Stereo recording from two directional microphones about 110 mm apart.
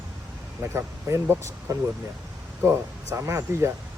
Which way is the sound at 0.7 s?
25° right (ahead or behind).